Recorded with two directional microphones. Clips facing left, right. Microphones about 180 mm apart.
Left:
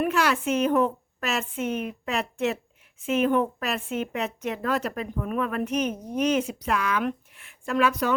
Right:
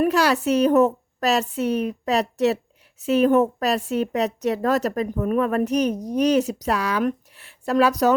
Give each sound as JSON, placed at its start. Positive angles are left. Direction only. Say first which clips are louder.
{"t": 0.0, "sound": "speech", "louder": "right 5 dB", "side_deg": -35}